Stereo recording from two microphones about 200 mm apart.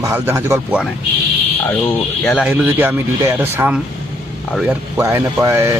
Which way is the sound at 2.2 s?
Centre (ahead or behind).